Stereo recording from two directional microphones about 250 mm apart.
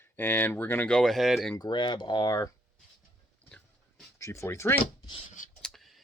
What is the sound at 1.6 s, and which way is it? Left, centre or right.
Speech, centre.